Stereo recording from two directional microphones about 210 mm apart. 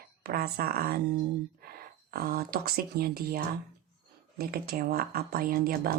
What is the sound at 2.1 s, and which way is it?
Speech, 45° right (ahead or behind).